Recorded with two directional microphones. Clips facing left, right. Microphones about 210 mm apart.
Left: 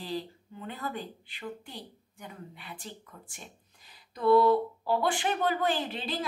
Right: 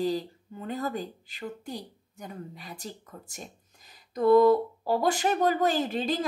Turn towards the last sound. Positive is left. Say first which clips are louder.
# right 5 dB
turn(degrees=-45)  # may be behind; listen again after turning